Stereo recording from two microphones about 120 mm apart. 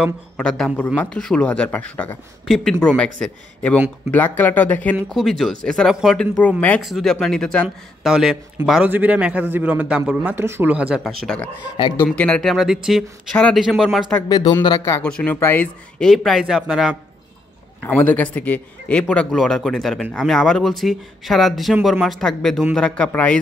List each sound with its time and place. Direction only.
0.4 s a man's voice: 5° left (ahead or behind)
5.1 s a man's voice: centre (ahead or behind)
11.1 s a man's voice: 5° left (ahead or behind)
11.8 s speech: 40° left (ahead or behind)
12.2 s a man's voice: 5° left (ahead or behind)
14.3 s speech: 35° left (ahead or behind)
15.0 s speech: 10° left (ahead or behind)
16.1 s a man's voice: centre (ahead or behind)
17.8 s a man's voice: 15° left (ahead or behind)